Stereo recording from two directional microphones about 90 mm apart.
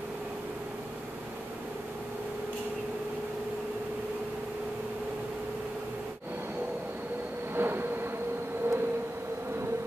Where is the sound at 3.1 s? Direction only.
15° right (ahead or behind).